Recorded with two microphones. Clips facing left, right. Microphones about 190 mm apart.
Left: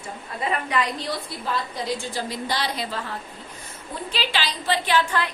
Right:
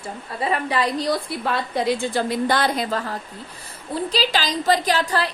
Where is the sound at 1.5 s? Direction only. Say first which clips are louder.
Right 5 dB; 60° right (ahead or behind).